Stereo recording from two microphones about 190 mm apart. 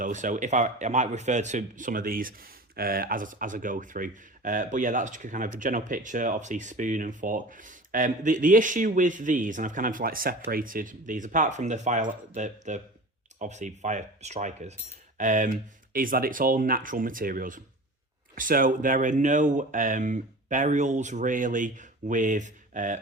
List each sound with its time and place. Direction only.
0.0 s speech: 40° right (ahead or behind)